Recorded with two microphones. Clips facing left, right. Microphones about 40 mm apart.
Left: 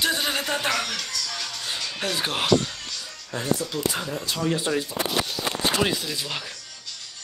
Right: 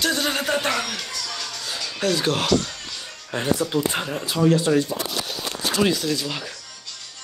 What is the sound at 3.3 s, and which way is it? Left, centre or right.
Speech, right.